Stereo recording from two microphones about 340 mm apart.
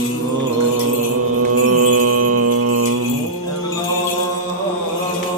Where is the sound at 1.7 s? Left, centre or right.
Right.